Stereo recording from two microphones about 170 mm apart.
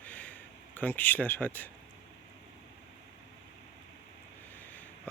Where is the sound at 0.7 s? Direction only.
10° left (ahead or behind).